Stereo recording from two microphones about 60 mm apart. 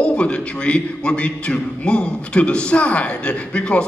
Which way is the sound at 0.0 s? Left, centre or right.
Centre.